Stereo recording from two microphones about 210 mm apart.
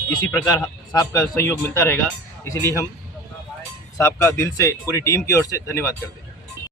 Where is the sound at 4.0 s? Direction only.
10° left (ahead or behind).